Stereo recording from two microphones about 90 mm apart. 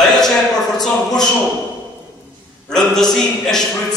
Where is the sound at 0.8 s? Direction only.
5° left (ahead or behind).